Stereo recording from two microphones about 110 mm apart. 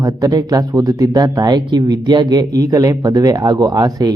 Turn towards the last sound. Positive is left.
turn(degrees=-35)  # may be behind; listen again after turning